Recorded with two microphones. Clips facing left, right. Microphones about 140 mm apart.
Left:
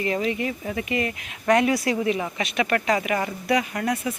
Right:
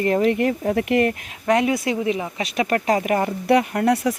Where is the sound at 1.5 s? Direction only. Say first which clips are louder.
Right 1 dB; 25° right (ahead or behind); by 3.3 s 40° right (ahead or behind).